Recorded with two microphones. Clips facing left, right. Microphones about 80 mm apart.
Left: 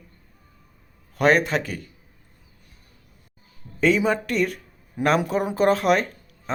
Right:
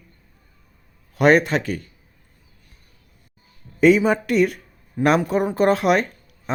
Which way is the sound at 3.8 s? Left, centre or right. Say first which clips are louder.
Right 5 dB; centre.